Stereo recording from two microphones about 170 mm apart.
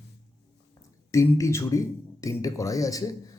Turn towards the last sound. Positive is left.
turn(degrees=20)  # may be behind; listen again after turning